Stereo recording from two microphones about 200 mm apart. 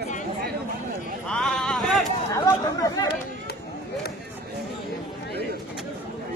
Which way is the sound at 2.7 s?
20° left (ahead or behind).